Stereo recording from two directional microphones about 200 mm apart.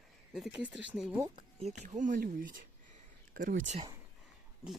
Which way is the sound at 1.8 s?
35° right (ahead or behind).